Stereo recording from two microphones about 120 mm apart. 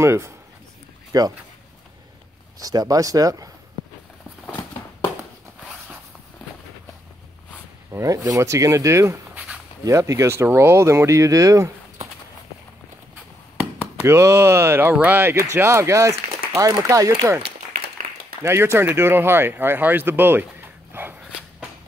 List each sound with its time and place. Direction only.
0.0 s a man's voice: 20° right (ahead or behind)
2.6 s a man's voice: 30° right (ahead or behind)
7.9 s a man's voice: 25° right (ahead or behind)
13.6 s a man's voice: 20° right (ahead or behind)
18.4 s speech: 20° right (ahead or behind)
20.9 s a sound: 15° right (ahead or behind)